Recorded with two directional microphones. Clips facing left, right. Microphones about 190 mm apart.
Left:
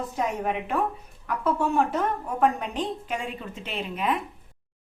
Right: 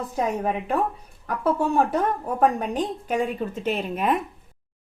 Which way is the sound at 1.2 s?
35° right (ahead or behind).